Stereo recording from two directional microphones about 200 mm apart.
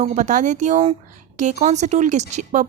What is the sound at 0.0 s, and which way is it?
Speech, 40° right (ahead or behind).